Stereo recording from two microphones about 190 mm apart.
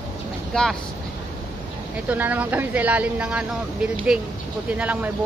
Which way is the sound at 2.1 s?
10° right (ahead or behind).